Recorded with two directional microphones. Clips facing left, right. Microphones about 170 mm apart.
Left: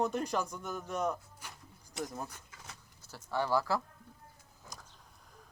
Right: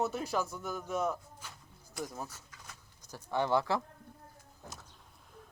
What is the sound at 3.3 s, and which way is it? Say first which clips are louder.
Speech: right 1 dB; 20° right (ahead or behind).